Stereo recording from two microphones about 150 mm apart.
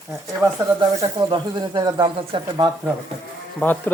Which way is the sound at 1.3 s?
30° right (ahead or behind).